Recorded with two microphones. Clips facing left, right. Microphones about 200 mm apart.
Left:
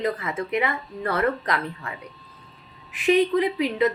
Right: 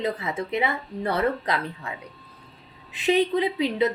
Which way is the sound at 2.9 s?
25° right (ahead or behind).